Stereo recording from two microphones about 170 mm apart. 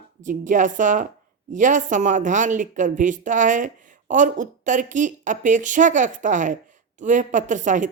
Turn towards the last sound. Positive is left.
turn(degrees=-45)  # may be behind; listen again after turning